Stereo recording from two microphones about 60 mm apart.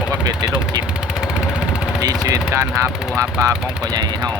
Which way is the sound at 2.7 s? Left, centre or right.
Right.